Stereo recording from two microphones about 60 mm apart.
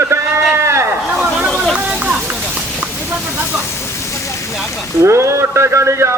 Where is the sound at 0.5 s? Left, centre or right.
Right.